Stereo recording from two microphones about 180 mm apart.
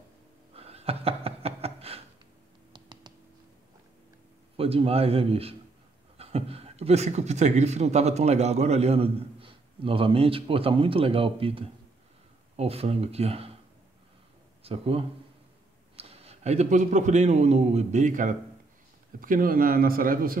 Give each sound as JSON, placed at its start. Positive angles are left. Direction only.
{"t": 0.6, "sound": "a sound", "side_deg": -35}
{"t": 2.7, "sound": "computer keyboard", "side_deg": -25}
{"t": 4.6, "sound": "a man's voice", "side_deg": -30}
{"t": 14.6, "sound": "a man's voice", "side_deg": -30}